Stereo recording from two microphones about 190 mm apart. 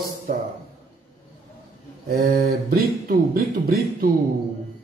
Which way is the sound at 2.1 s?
50° right (ahead or behind).